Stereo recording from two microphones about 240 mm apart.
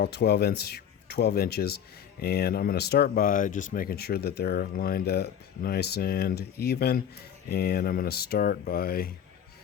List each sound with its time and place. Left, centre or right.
0.0 s speech: left